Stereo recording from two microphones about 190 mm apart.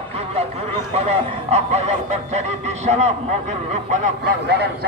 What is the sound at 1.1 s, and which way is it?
Speech, 35° right (ahead or behind).